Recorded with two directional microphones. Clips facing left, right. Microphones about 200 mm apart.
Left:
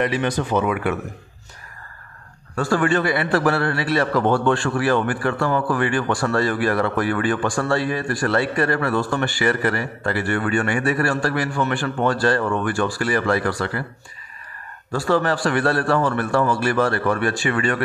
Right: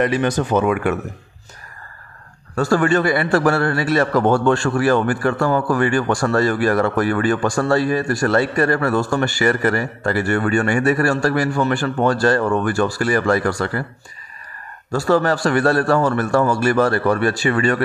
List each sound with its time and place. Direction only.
0.0 s a man's voice: 45° right (ahead or behind)
2.5 s a man's voice: 40° right (ahead or behind)
14.9 s a man's voice: 40° right (ahead or behind)